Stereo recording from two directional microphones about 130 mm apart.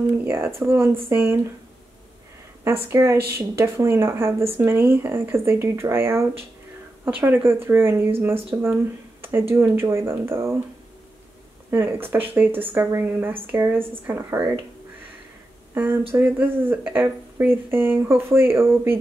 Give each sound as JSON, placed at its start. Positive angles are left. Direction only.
{"t": 0.2, "sound": "speech", "side_deg": -15}
{"t": 2.6, "sound": "speech", "side_deg": -20}
{"t": 11.7, "sound": "speech", "side_deg": -20}
{"t": 15.7, "sound": "speech", "side_deg": -15}